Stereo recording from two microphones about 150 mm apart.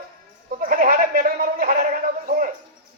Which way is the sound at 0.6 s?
70° right (ahead or behind).